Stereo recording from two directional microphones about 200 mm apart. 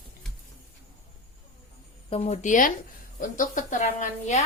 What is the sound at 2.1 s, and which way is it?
A woman's voice, 35° left (ahead or behind).